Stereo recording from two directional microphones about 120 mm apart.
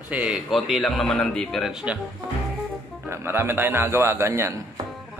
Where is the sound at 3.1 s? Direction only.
20° right (ahead or behind).